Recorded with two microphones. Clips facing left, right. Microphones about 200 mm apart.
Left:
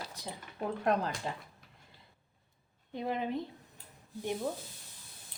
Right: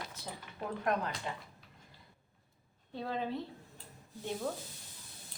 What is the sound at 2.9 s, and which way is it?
Speech, 15° left (ahead or behind).